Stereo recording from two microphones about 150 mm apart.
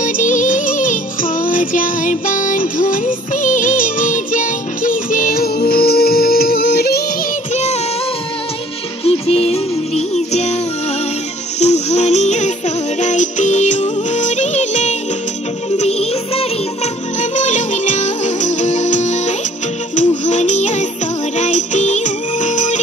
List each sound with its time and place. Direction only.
0.0 s music: 60° left (ahead or behind); by 7.0 s 90° left
7.5 s synthetic singing: 45° left (ahead or behind)
9.0 s music: 45° left (ahead or behind)
11.6 s music: 50° left (ahead or behind)